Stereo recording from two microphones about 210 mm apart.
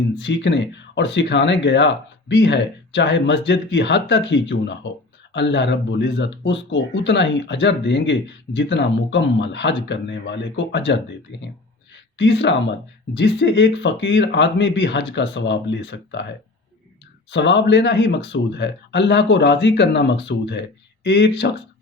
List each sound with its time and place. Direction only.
0.2 s speech: 55° left (ahead or behind)
17.3 s speech: 55° left (ahead or behind)